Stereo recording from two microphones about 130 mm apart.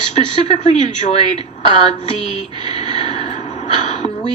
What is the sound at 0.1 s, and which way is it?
Speech, 60° left (ahead or behind).